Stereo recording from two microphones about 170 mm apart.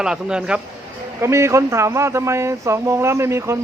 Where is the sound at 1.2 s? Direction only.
15° right (ahead or behind).